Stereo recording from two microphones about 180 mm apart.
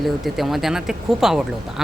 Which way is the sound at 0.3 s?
Centre (ahead or behind).